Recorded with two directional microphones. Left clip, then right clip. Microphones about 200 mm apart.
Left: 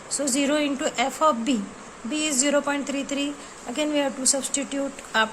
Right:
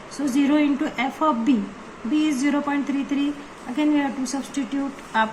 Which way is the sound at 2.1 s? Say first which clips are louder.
Right 1 dB; 60° left (ahead or behind).